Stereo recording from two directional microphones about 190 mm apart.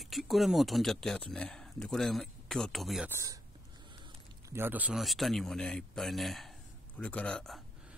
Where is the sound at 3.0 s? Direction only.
15° right (ahead or behind).